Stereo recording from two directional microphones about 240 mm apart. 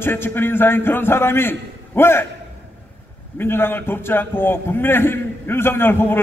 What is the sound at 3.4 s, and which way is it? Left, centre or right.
A man's voice, centre.